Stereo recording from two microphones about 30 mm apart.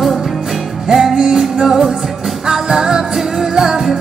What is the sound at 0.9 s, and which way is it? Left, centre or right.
Music, centre.